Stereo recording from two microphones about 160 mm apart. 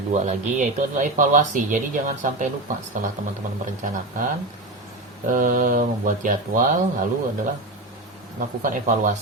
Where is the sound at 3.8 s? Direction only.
55° right (ahead or behind).